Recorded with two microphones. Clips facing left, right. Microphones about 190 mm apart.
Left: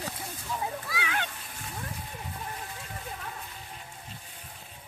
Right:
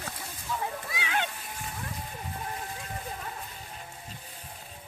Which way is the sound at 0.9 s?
20° right (ahead or behind).